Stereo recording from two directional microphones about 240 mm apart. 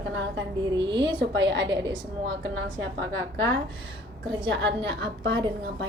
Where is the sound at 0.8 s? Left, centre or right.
Centre.